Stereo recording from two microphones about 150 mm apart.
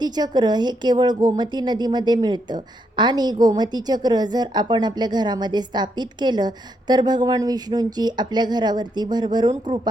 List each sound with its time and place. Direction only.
0.0 s a woman's voice: 30° right (ahead or behind)